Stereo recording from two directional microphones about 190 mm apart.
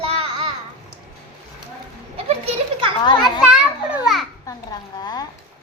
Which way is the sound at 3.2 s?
5° right (ahead or behind).